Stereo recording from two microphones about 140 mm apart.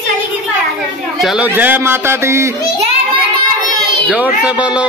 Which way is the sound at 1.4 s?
15° right (ahead or behind).